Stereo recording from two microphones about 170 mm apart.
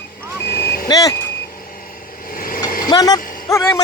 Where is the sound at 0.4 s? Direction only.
65° left (ahead or behind).